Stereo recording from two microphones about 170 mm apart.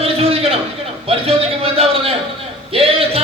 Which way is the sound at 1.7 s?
35° right (ahead or behind).